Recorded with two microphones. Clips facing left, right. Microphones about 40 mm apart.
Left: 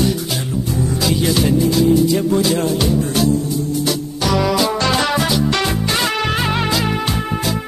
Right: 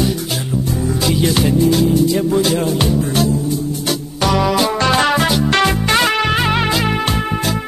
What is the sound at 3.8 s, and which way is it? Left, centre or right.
Music, right.